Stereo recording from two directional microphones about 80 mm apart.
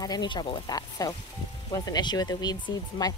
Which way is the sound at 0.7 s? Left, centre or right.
Left.